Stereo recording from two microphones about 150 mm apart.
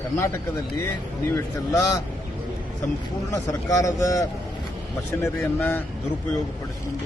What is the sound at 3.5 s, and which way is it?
Speech, 20° left (ahead or behind).